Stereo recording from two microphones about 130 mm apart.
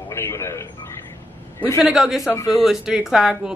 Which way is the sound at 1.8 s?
5° right (ahead or behind).